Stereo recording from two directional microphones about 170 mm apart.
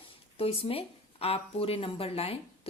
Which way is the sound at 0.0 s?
35° left (ahead or behind).